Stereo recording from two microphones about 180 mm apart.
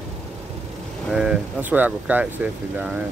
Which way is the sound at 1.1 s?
5° right (ahead or behind).